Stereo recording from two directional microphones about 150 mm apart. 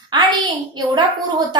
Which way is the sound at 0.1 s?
30° right (ahead or behind).